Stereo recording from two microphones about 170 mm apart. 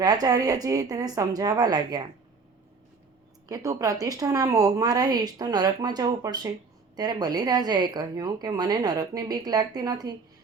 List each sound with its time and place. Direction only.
0.0 s a woman's voice: 25° right (ahead or behind)
3.5 s a woman's voice: 20° right (ahead or behind)